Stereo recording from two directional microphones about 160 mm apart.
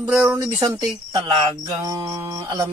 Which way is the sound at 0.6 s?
25° right (ahead or behind).